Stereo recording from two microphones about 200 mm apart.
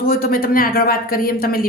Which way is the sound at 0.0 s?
50° left (ahead or behind).